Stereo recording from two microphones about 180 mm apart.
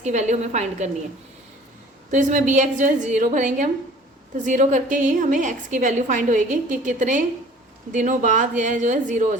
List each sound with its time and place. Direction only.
0.0 s a woman's voice: 40° right (ahead or behind)
2.0 s a woman's voice: 45° right (ahead or behind)